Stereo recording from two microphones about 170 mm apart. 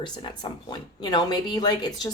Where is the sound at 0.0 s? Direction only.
25° left (ahead or behind).